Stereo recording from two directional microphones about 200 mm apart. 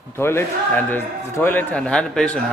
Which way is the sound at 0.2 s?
10° left (ahead or behind).